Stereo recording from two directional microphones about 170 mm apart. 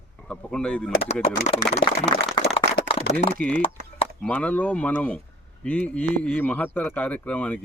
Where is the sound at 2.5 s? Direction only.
30° left (ahead or behind).